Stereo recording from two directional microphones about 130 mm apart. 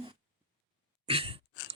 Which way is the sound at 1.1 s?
45° right (ahead or behind).